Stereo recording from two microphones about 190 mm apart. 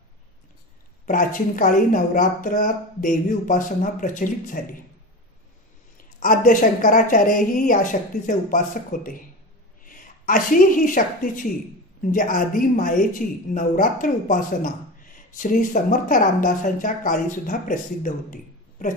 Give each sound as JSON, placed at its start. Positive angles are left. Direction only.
{"t": 1.0, "sound": "speech", "side_deg": 45}
{"t": 6.1, "sound": "a woman's voice", "side_deg": 45}